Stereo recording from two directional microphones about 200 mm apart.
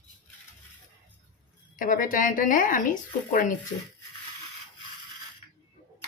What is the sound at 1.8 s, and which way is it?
Speech, 45° left (ahead or behind).